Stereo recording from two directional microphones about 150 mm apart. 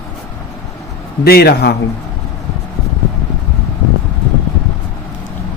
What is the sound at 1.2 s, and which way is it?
Speech, 90° left.